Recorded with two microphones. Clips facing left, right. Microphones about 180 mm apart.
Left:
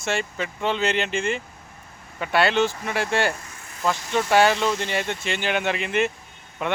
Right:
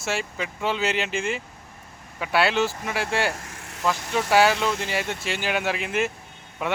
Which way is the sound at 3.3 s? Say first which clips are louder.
Right 2 dB; 90° right.